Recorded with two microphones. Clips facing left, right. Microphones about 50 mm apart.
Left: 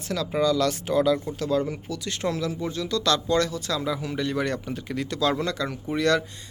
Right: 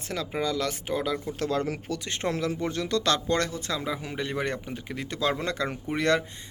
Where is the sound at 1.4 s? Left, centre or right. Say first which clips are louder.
Left 3 dB; right.